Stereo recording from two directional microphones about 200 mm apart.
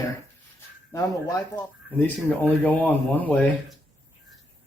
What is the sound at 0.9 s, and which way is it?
Speech, 15° left (ahead or behind).